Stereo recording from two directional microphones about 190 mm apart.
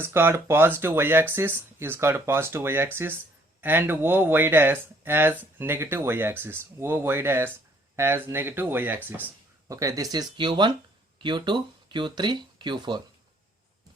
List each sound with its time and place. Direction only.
0.0 s speech: 10° right (ahead or behind)